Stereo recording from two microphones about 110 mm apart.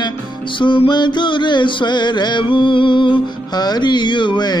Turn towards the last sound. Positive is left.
turn(degrees=45)  # may be behind; listen again after turning